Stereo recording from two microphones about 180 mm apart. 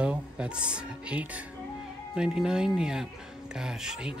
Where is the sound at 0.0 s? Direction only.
5° right (ahead or behind).